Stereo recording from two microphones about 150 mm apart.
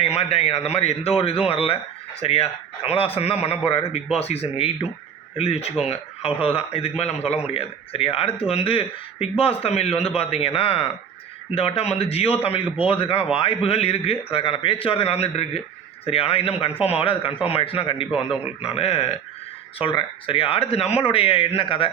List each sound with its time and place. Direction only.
0.0 s a man's voice: 40° left (ahead or behind)